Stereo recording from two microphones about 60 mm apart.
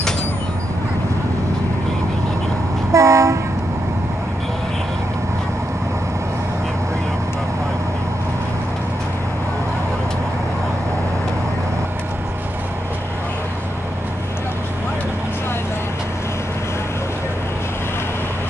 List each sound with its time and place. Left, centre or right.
2.9 s train: right